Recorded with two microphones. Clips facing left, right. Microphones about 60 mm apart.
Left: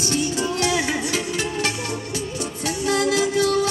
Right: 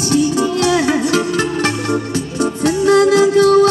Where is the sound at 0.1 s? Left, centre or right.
Right.